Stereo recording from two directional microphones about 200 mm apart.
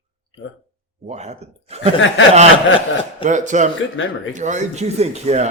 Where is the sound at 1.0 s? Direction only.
35° right (ahead or behind).